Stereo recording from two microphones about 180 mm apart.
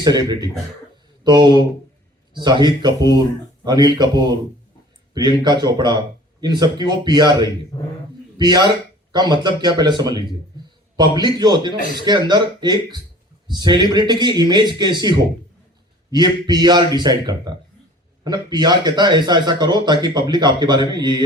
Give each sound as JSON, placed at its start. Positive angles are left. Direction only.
{"t": 0.0, "sound": "speech", "side_deg": -25}
{"t": 7.7, "sound": "speech", "side_deg": 20}
{"t": 8.4, "sound": "speech", "side_deg": -25}